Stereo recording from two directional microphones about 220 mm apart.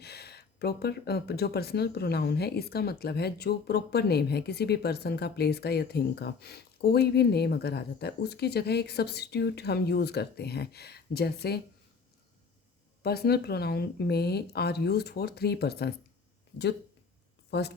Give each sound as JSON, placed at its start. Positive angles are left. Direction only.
{"t": 0.0, "sound": "speech", "side_deg": 45}
{"t": 13.0, "sound": "speech", "side_deg": 45}
{"t": 17.5, "sound": "speech", "side_deg": 50}